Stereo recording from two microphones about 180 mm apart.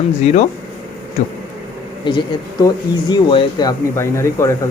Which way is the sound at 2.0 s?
25° left (ahead or behind).